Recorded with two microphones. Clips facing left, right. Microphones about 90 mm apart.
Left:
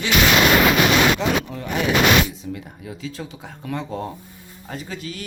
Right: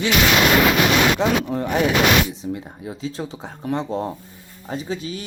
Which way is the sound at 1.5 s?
35° right (ahead or behind).